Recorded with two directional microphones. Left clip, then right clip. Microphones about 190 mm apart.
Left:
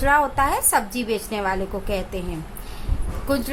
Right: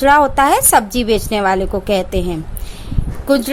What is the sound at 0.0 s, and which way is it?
A woman's voice, 40° right (ahead or behind).